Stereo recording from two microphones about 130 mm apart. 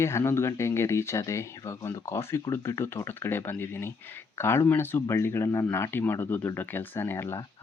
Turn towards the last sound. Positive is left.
turn(degrees=20)  # may be behind; listen again after turning